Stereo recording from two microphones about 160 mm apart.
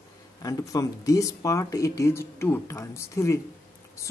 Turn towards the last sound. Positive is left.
turn(degrees=15)  # may be behind; listen again after turning